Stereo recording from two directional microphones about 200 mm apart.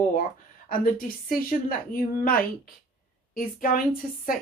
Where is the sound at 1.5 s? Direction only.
45° left (ahead or behind).